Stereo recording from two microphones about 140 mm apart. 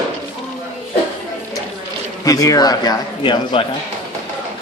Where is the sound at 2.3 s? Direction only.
25° left (ahead or behind).